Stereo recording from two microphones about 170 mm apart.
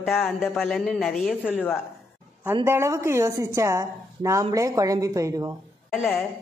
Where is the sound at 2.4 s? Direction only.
15° right (ahead or behind).